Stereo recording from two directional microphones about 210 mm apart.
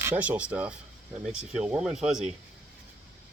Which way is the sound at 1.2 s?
5° right (ahead or behind).